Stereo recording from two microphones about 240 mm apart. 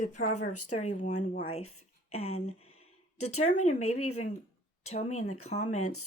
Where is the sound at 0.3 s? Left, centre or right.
Left.